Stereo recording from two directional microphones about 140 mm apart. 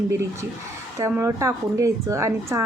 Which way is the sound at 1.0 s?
20° right (ahead or behind).